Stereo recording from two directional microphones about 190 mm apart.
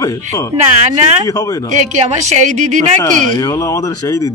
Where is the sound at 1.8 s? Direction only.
40° right (ahead or behind).